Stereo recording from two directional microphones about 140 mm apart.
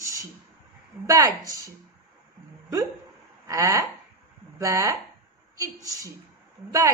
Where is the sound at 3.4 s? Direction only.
25° right (ahead or behind).